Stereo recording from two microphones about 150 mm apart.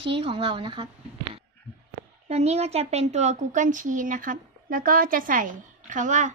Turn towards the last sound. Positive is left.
turn(degrees=-55)  # may be behind; listen again after turning